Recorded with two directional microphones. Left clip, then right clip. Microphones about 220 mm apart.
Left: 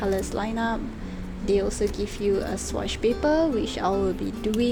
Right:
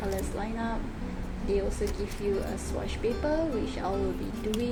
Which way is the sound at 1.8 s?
45° left (ahead or behind).